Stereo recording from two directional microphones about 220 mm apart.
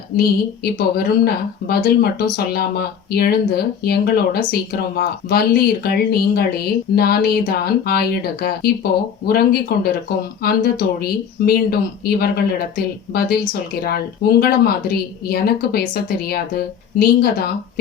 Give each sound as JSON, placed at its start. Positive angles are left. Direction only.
{"t": 0.2, "sound": "speech", "side_deg": 45}